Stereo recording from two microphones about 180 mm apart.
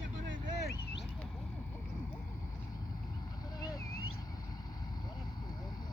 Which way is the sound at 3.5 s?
20° left (ahead or behind).